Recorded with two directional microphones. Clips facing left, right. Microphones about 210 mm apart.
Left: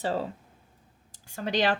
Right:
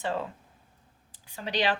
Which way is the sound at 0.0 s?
35° left (ahead or behind).